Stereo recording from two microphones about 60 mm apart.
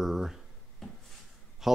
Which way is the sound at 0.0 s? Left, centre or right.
Centre.